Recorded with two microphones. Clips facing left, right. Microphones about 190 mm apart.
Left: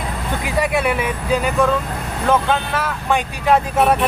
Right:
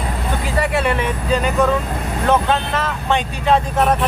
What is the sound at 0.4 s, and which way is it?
Speech, 15° left (ahead or behind).